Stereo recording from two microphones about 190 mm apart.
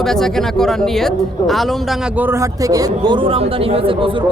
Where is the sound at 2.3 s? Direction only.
15° right (ahead or behind).